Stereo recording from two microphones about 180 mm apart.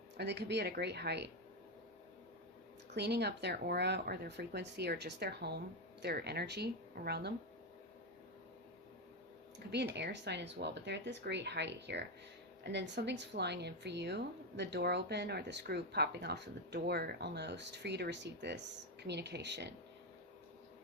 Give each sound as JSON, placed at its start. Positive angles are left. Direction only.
{"t": 0.2, "sound": "speech", "side_deg": -70}
{"t": 2.9, "sound": "speech", "side_deg": -65}
{"t": 9.7, "sound": "speech", "side_deg": -70}